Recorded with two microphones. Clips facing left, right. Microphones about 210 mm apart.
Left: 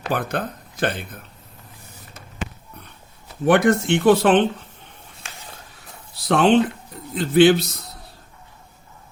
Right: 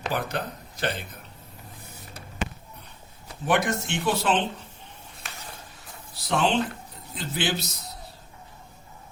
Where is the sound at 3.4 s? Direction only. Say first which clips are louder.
Left 9 dB; 55° left (ahead or behind).